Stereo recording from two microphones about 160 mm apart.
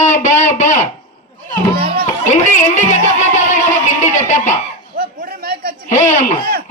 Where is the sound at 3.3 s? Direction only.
50° left (ahead or behind).